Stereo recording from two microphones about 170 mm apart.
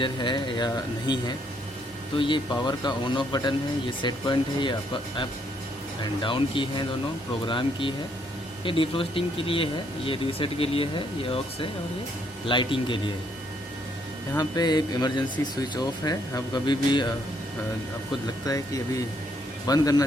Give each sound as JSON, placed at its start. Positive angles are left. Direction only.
{"t": 0.0, "sound": "speech", "side_deg": 30}
{"t": 6.0, "sound": "speech", "side_deg": 30}
{"t": 14.3, "sound": "speech", "side_deg": 25}
{"t": 18.4, "sound": "speech", "side_deg": 20}